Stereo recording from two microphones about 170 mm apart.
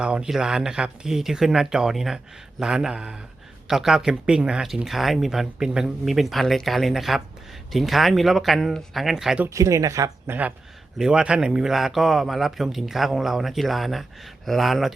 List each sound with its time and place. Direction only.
0.0 s speech: 5° right (ahead or behind)
9.5 s speech: 20° right (ahead or behind); by 14.9 s centre (ahead or behind)